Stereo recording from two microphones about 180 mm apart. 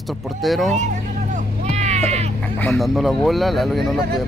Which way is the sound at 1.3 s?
40° right (ahead or behind).